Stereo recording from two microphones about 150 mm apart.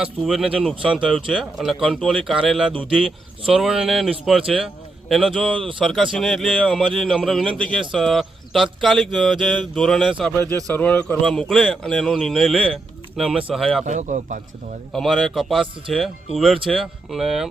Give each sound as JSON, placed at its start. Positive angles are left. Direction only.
{"t": 0.0, "sound": "speech", "side_deg": -5}
{"t": 10.7, "sound": "speech", "side_deg": 10}
{"t": 13.8, "sound": "speech", "side_deg": -55}
{"t": 14.9, "sound": "speech", "side_deg": 0}